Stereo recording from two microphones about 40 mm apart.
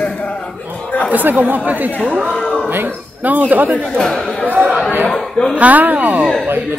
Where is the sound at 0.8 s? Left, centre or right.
Left.